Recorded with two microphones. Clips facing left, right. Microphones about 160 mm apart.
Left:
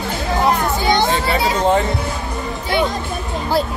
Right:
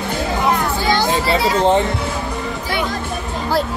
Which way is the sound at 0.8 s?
20° left (ahead or behind).